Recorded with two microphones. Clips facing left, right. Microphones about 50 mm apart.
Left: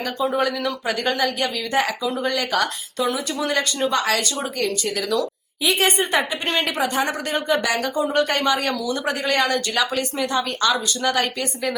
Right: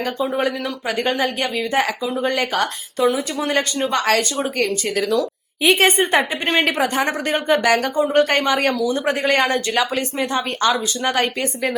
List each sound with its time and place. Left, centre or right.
0.9 s a woman's voice: right